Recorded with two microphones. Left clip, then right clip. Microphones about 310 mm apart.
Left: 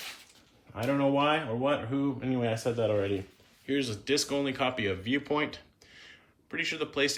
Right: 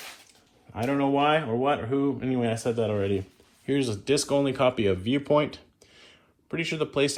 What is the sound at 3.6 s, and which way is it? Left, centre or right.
Speech, centre.